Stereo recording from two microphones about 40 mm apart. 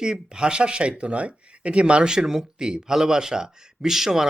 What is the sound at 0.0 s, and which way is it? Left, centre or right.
A man's voice, centre.